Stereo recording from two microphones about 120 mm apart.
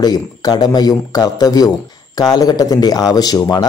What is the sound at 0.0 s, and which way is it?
A man's voice, 35° left (ahead or behind).